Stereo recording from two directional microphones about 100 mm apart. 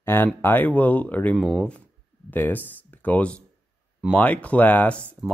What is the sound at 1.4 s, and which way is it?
Speech, 5° right (ahead or behind).